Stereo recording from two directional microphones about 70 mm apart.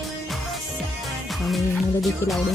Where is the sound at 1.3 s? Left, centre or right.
Centre.